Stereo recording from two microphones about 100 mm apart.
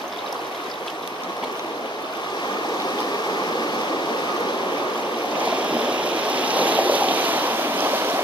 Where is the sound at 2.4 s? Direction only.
45° left (ahead or behind).